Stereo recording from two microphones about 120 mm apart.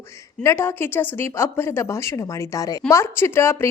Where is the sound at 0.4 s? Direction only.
20° left (ahead or behind).